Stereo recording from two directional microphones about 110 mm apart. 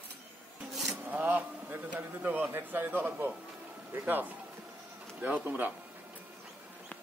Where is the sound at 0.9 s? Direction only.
15° right (ahead or behind).